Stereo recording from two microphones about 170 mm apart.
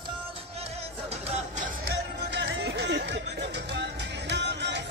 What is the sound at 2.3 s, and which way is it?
Music, 80° right.